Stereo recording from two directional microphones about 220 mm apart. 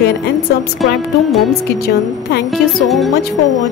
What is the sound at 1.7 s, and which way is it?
Speech, 45° left (ahead or behind).